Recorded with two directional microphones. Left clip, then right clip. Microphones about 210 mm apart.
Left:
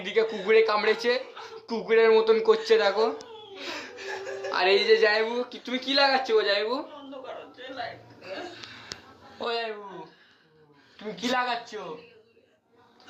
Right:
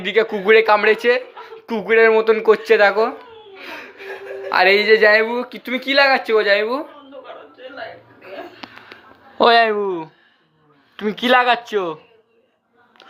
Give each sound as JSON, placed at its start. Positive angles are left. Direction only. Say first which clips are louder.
{"t": 0.0, "sound": "speech", "louder": "right 8 dB", "side_deg": -25}
{"t": 4.5, "sound": "speech", "louder": "right 8 dB", "side_deg": -25}
{"t": 8.9, "sound": "a sound", "louder": "right 1 dB", "side_deg": -20}
{"t": 9.4, "sound": "speech", "louder": "right 18 dB", "side_deg": -45}
{"t": 10.9, "sound": "speech", "louder": "right 13 dB", "side_deg": -45}